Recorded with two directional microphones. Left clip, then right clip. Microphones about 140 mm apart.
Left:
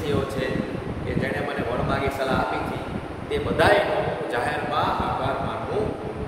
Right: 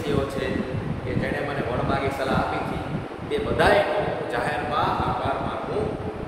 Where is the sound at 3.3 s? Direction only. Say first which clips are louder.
Even; 15° left (ahead or behind).